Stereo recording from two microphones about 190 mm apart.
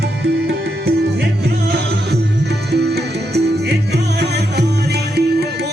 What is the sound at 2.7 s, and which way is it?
Music, 60° right (ahead or behind).